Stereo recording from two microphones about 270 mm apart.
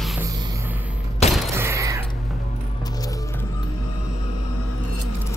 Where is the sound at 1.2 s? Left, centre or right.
Left.